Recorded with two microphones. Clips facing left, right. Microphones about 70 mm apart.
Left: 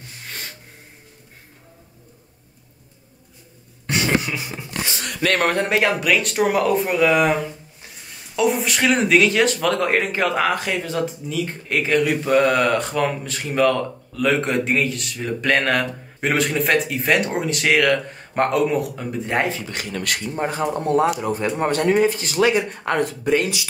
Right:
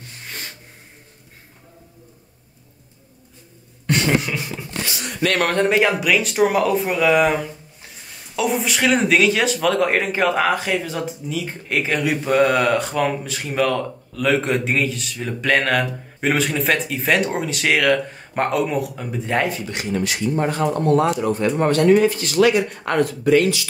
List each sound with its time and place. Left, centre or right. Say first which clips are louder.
3.8 s beatboxing: right 2 dB; centre
5.6 s speech: right 2 dB; centre
8.4 s speech: left 1 dB; centre
19.9 s speech: right 5 dB; left
20.3 s speech: right 2 dB; centre